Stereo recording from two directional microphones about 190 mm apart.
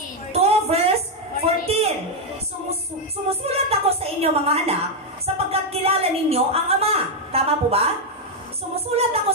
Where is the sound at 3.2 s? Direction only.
30° right (ahead or behind).